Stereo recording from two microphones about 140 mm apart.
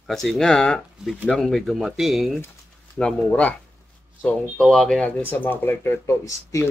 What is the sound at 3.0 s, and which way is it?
Speech, 15° left (ahead or behind).